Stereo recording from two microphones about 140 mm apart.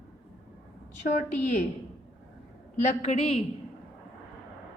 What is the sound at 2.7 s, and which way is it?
Speech, 55° left (ahead or behind).